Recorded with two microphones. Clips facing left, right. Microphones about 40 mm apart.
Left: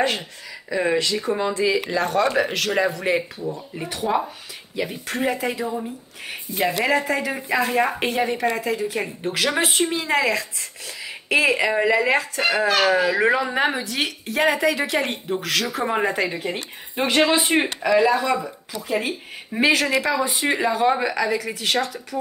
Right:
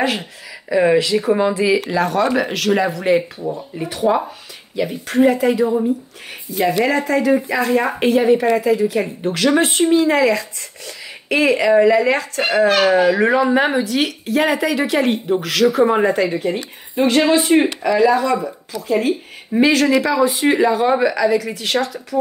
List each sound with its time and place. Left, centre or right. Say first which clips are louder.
0.7 s speech: right 7 dB; centre
17.0 s a woman's voice: right 4 dB; centre